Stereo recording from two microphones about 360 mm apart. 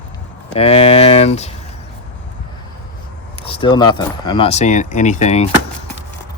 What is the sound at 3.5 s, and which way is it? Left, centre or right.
Speech, centre.